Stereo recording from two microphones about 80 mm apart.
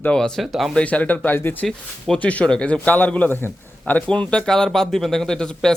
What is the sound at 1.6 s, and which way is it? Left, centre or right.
A man's voice, centre.